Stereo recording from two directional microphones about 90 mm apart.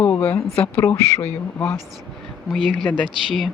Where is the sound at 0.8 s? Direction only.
30° left (ahead or behind).